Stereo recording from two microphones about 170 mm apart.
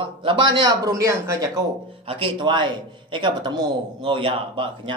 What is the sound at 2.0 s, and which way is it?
Speech, 30° right (ahead or behind).